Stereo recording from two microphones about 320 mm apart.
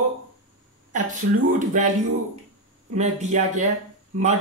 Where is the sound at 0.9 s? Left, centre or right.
Right.